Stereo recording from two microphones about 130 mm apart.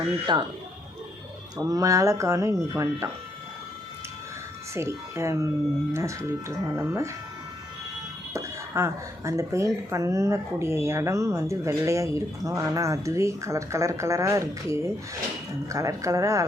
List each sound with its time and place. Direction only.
0.3 s speech: 35° right (ahead or behind)
1.5 s speech: 25° right (ahead or behind)
4.7 s speech: 20° right (ahead or behind)
8.3 s speech: 20° right (ahead or behind)